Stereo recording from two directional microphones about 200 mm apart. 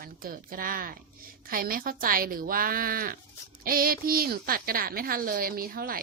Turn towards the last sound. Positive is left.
turn(degrees=-45)  # may be behind; listen again after turning